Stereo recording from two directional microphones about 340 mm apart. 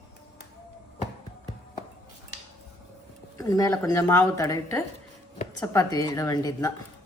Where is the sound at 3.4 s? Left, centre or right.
Centre.